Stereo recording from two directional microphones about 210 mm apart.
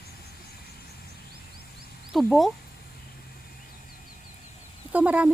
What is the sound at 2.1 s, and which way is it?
Speech, centre (ahead or behind).